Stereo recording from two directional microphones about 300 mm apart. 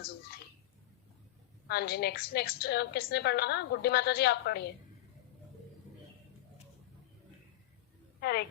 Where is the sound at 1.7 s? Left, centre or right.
Left.